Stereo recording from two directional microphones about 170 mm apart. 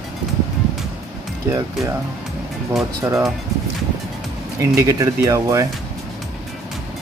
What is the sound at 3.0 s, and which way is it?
Speech, 15° right (ahead or behind).